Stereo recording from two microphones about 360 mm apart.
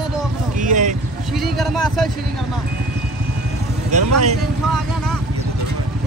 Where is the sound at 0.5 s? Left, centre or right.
Right.